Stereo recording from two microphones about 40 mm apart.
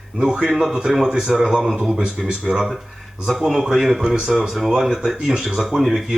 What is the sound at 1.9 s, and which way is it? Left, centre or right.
Speech, right.